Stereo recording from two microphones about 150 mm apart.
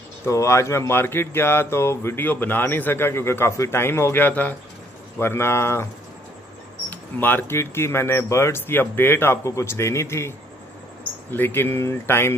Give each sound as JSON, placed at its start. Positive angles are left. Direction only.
{"t": 0.2, "sound": "speech", "side_deg": 20}
{"t": 6.9, "sound": "speech", "side_deg": 10}